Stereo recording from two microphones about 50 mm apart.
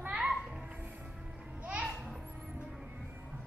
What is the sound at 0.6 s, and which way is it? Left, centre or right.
Music, right.